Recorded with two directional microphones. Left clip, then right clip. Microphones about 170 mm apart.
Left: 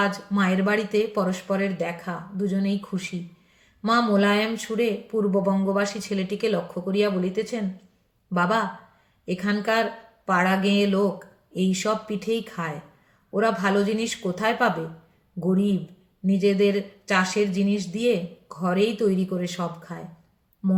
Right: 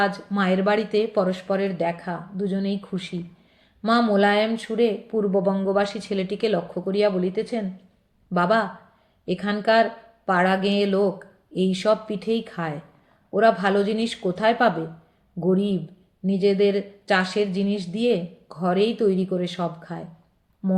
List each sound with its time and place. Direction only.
0.0 s a woman's voice: 20° right (ahead or behind)
16.2 s a woman's voice: 20° right (ahead or behind)